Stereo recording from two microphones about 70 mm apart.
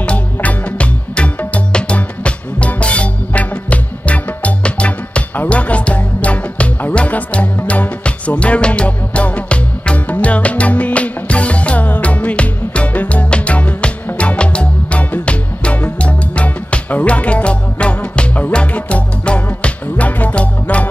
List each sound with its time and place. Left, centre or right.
0.0 s music: centre